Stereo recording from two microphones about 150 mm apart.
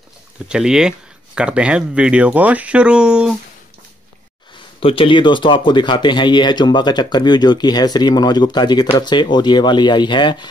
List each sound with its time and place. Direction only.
0.5 s speech: 5° right (ahead or behind)
4.7 s speech: 35° left (ahead or behind)